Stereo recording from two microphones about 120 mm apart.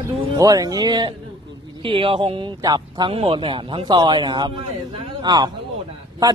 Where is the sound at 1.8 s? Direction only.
45° right (ahead or behind).